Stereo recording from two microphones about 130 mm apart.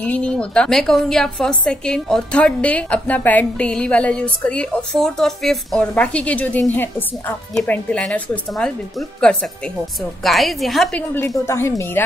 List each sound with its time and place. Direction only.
0.0 s a woman's voice: 10° left (ahead or behind)
11.2 s a woman's voice: 20° left (ahead or behind)